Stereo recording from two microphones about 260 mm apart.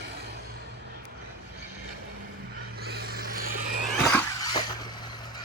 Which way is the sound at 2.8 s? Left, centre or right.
Right.